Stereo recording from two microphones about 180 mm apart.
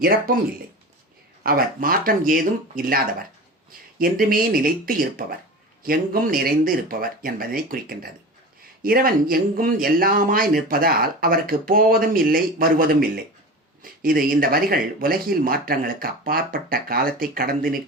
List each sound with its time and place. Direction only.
0.0 s speech: 55° right (ahead or behind)
1.5 s speech: 55° right (ahead or behind)